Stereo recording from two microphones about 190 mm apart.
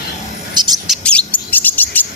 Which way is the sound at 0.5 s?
25° right (ahead or behind).